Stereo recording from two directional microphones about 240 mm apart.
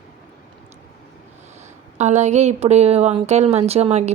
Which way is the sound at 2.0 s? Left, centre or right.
Right.